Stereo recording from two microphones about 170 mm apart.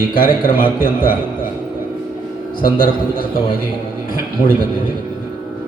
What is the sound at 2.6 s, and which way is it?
Speech, 55° left (ahead or behind).